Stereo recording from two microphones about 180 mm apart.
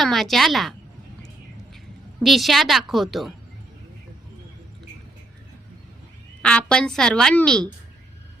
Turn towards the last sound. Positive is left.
turn(degrees=5)  # may be behind; listen again after turning